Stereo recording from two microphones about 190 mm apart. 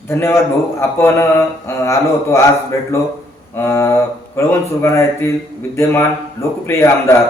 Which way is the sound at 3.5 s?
15° left (ahead or behind).